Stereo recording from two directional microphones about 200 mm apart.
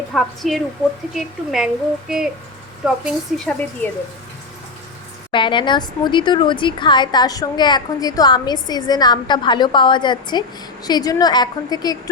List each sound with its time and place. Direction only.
0.1 s a woman's voice: centre (ahead or behind)
5.3 s speech: 25° left (ahead or behind)